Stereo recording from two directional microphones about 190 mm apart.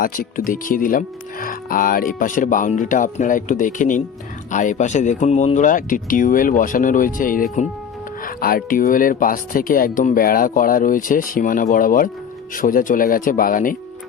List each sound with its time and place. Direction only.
0.0 s speech: 45° left (ahead or behind)